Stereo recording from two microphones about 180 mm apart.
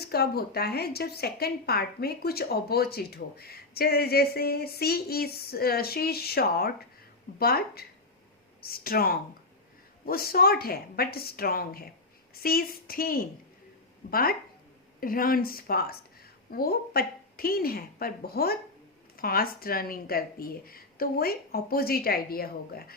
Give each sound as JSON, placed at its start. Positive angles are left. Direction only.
{"t": 0.0, "sound": "a woman's voice", "side_deg": 60}